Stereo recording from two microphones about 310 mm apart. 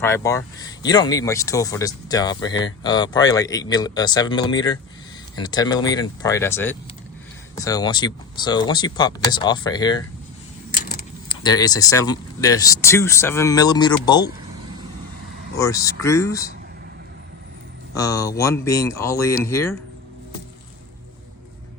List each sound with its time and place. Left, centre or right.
0.0 s speech: centre
10.7 s keys jangling: left
11.3 s speech: centre
15.5 s speech: centre
17.9 s speech: centre